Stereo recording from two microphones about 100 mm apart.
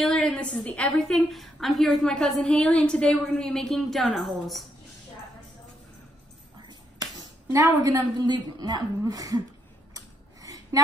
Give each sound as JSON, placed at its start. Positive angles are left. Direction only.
{"t": 0.0, "sound": "a woman's voice", "side_deg": 10}
{"t": 6.7, "sound": "speech", "side_deg": -40}
{"t": 9.9, "sound": "a sound", "side_deg": -35}